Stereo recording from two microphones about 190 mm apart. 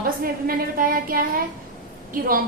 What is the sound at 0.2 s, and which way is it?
A woman's voice, 50° right (ahead or behind).